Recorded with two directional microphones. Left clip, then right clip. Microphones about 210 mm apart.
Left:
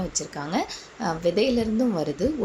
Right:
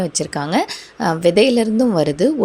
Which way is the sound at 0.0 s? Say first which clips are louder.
Right 9 dB; 40° right (ahead or behind).